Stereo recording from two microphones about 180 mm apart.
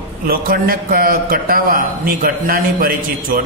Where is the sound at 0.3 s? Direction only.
55° right (ahead or behind).